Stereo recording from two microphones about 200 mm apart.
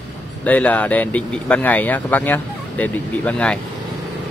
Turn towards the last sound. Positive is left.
turn(degrees=5)  # may be behind; listen again after turning